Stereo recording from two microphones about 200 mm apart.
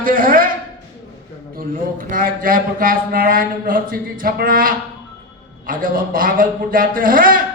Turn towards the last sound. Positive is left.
turn(degrees=-45)  # may be behind; listen again after turning